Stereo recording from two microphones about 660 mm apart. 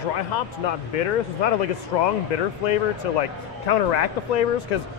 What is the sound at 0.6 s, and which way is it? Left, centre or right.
Speech, left.